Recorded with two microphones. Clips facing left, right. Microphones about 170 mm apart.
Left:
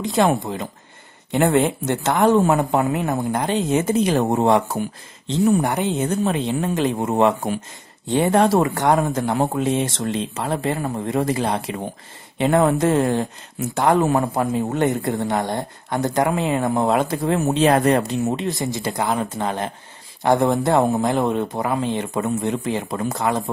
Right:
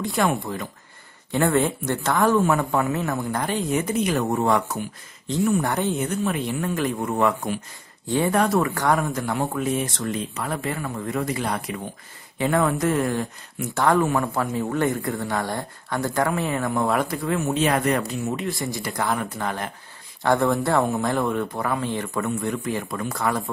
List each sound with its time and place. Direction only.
0.0 s speech: 20° left (ahead or behind)
11.1 s speech: 30° left (ahead or behind)